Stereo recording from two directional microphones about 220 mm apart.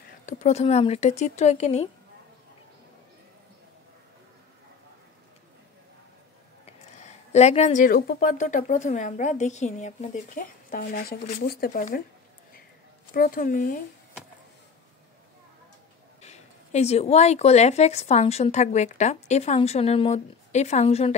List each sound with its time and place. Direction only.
0.3 s a woman's voice: 30° left (ahead or behind)
6.6 s a woman's voice: 30° left (ahead or behind)
13.1 s a woman's voice: 40° left (ahead or behind)
16.2 s speech: 30° left (ahead or behind)